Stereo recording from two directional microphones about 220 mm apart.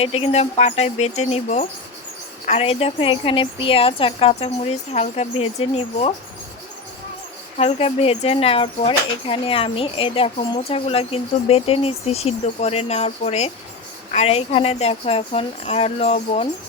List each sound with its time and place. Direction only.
0.0 s speech: 25° left (ahead or behind)
7.5 s speech: 25° left (ahead or behind)